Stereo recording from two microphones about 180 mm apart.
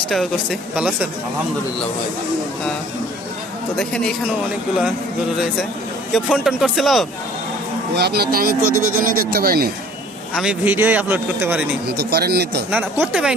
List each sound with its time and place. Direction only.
3.8 s speech: 5° left (ahead or behind)
6.1 s speech: 5° right (ahead or behind)
7.9 s speech: 65° right (ahead or behind)
10.3 s a man's voice: 5° right (ahead or behind)
11.9 s speech: 60° right (ahead or behind)
12.7 s a man's voice: 10° right (ahead or behind)